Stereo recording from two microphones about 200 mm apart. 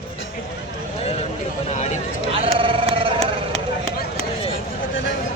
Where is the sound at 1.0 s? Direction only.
30° left (ahead or behind).